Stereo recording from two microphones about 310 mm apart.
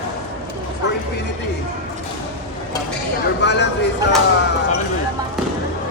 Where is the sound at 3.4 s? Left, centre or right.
Left.